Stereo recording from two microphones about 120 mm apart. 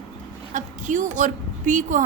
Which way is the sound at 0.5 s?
90° right.